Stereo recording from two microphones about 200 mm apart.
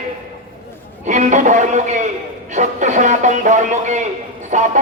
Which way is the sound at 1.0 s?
40° right (ahead or behind).